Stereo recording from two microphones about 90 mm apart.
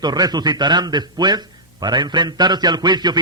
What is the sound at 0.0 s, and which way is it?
A man's voice, 50° right (ahead or behind).